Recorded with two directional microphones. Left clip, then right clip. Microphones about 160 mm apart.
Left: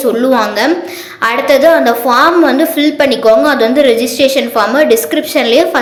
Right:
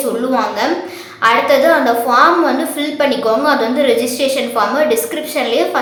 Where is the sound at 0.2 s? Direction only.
30° left (ahead or behind).